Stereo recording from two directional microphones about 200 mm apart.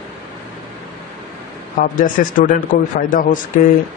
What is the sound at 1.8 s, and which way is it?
Speech, 45° left (ahead or behind).